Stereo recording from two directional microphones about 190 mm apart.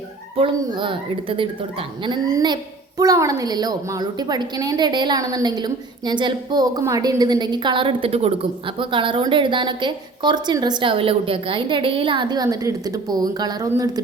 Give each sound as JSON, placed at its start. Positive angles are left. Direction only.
{"t": 0.3, "sound": "a woman's voice", "side_deg": -25}